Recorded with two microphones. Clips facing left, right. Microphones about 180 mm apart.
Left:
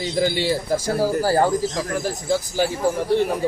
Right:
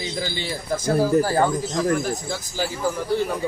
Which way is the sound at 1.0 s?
35° left (ahead or behind).